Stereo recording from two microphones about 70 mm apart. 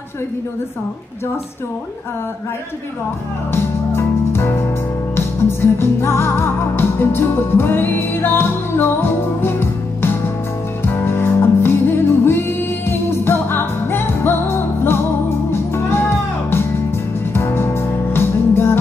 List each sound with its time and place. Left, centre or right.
3.5 s music: left